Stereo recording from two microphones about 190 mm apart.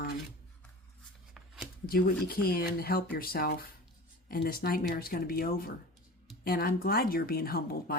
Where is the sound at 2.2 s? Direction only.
50° left (ahead or behind).